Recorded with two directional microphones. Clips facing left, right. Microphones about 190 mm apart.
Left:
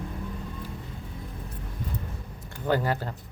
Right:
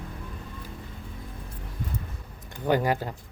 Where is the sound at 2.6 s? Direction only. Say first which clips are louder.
Right 2 dB; 15° right (ahead or behind).